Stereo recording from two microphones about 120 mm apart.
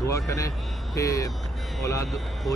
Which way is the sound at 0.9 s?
30° left (ahead or behind).